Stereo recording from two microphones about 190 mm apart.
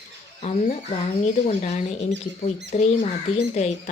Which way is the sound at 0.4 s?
35° left (ahead or behind).